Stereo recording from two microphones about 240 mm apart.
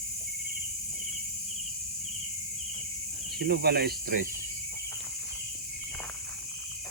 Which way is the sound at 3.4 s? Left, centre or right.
Right.